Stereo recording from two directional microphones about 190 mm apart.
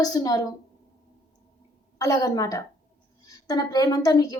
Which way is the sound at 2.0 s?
20° left (ahead or behind).